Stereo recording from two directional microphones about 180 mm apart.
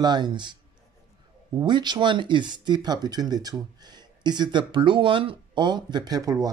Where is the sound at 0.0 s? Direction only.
25° right (ahead or behind).